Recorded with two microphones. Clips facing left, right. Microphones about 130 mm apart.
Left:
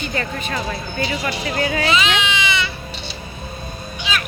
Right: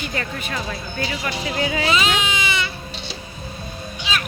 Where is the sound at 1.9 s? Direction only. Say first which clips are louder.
Left 1 dB; 40° right (ahead or behind).